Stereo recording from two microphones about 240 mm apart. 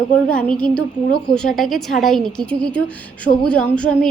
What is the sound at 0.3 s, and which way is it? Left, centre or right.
A woman's voice, centre.